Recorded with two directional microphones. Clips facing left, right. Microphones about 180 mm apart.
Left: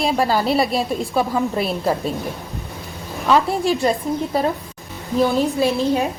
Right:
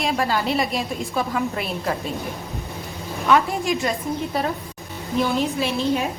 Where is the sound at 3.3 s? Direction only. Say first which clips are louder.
Left 2 dB; 30° left (ahead or behind).